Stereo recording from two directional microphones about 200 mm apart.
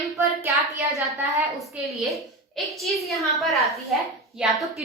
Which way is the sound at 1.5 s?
Centre (ahead or behind).